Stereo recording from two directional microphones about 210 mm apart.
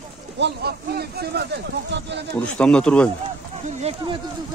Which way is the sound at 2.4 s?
5° left (ahead or behind).